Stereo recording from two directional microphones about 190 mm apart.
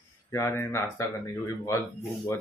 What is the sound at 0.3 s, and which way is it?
Speech, 15° left (ahead or behind).